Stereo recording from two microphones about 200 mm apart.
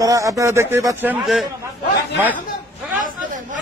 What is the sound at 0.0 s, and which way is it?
A man's voice, 15° right (ahead or behind).